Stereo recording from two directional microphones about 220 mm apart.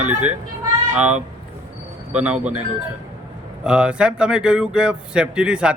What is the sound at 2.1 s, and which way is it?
Speech, 5° right (ahead or behind).